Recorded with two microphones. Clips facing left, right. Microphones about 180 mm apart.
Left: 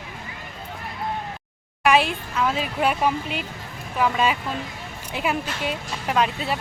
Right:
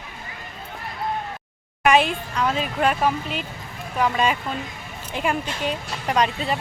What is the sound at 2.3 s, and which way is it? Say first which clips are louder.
A woman's voice: even; 5° left (ahead or behind).